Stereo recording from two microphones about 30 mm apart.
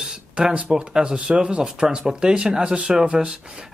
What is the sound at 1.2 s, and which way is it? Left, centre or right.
Speech, right.